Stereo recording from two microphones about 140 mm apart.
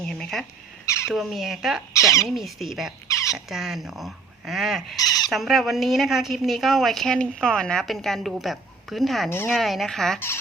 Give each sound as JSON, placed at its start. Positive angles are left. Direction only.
{"t": 0.0, "sound": "speech", "side_deg": 5}
{"t": 0.9, "sound": "a sound", "side_deg": 20}
{"t": 1.1, "sound": "a woman's voice", "side_deg": 0}
{"t": 1.9, "sound": "speech", "side_deg": 20}
{"t": 2.2, "sound": "a woman's voice", "side_deg": 0}
{"t": 3.1, "sound": "a sound", "side_deg": 25}
{"t": 3.3, "sound": "a woman's voice", "side_deg": 0}
{"t": 4.9, "sound": "a sound", "side_deg": 30}
{"t": 5.3, "sound": "a woman's voice", "side_deg": 0}